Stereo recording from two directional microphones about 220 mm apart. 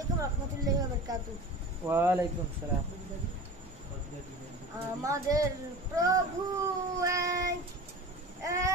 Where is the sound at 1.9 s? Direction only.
10° right (ahead or behind).